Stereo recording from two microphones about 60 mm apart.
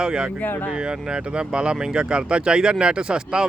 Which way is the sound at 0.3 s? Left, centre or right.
Left.